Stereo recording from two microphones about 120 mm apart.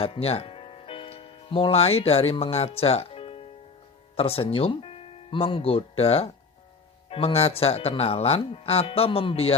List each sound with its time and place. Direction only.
0.0 s speech: 55° left (ahead or behind)